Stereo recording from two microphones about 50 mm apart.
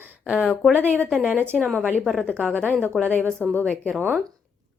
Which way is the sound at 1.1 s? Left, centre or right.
Right.